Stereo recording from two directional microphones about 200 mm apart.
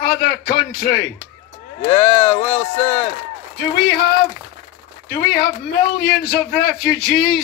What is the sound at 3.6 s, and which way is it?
A man's voice, 55° left (ahead or behind).